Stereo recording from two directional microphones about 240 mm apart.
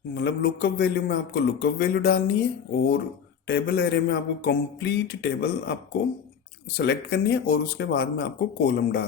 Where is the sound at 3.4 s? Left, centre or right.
Left.